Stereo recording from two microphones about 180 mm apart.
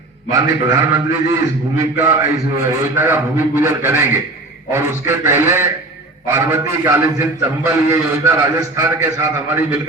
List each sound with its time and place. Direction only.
0.3 s a man's voice: 20° right (ahead or behind)